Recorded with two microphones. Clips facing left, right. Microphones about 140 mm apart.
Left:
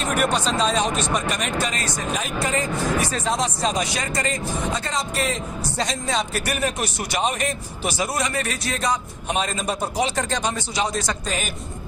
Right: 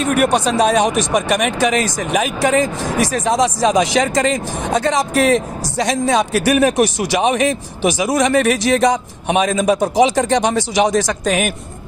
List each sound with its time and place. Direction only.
0.0 s speech: 60° right (ahead or behind); by 11.5 s 75° right (ahead or behind)